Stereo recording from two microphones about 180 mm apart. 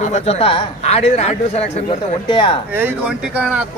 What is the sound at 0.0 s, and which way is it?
A man's voice, 40° left (ahead or behind).